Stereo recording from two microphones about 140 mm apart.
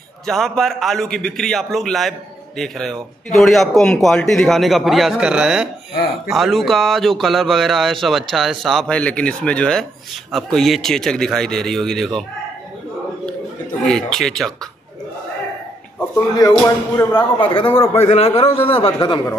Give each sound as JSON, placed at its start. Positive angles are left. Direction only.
{"t": 0.3, "sound": "speech", "side_deg": 0}
{"t": 13.8, "sound": "speech", "side_deg": 5}
{"t": 16.3, "sound": "speech", "side_deg": 25}
{"t": 17.9, "sound": "a man's voice", "side_deg": 45}